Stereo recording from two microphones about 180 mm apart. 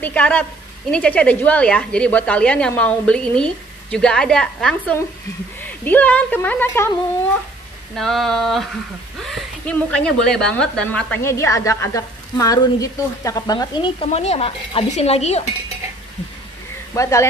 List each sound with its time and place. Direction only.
0.0 s a woman's voice: 10° left (ahead or behind)
7.9 s a woman's voice: centre (ahead or behind); by 15.4 s 35° left (ahead or behind)
16.9 s a woman's voice: 15° left (ahead or behind)